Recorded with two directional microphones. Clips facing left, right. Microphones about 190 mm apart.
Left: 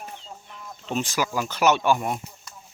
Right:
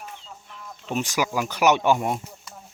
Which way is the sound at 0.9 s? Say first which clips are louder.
Right 1 dB; 15° right (ahead or behind).